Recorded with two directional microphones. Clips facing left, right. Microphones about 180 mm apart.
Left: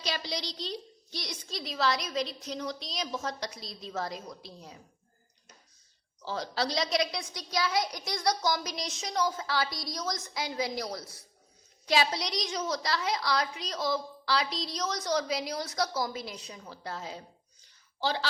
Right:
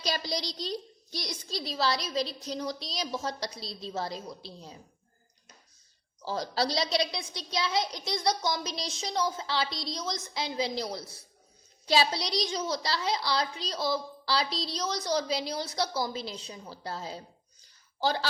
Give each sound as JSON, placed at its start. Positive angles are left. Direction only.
{"t": 0.0, "sound": "a child's voice", "side_deg": -40}
{"t": 6.2, "sound": "a woman's voice", "side_deg": -40}